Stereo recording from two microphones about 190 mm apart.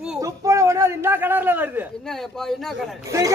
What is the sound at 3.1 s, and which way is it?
Speech, 15° right (ahead or behind).